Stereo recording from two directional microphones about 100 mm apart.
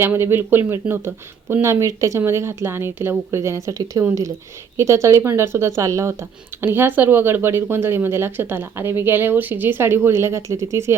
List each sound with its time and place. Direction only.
0.0 s speech: 25° right (ahead or behind)